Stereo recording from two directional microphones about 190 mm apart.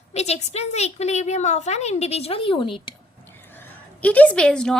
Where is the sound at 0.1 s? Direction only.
35° left (ahead or behind).